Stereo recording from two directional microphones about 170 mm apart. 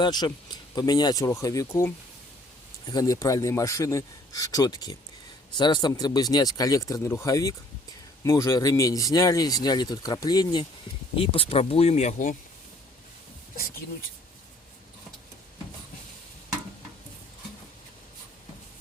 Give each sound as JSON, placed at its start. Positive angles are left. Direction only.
{"t": 0.0, "sound": "speech", "side_deg": 25}
{"t": 13.6, "sound": "speech", "side_deg": 60}